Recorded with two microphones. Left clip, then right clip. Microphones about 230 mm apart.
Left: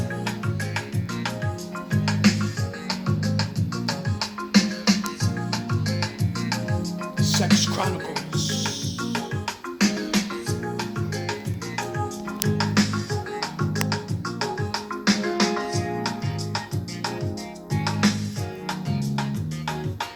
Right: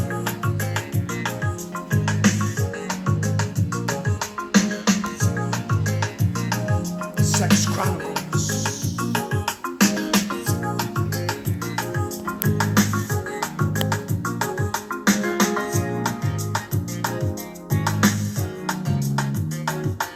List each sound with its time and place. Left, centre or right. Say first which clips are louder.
0.1 s music: right 3 dB; right
1.9 s music: right 1 dB; right
12.5 s music: right 2 dB; right
17.7 s music: right 3 dB; right